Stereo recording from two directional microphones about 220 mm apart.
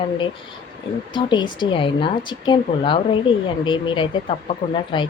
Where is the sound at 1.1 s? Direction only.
20° left (ahead or behind).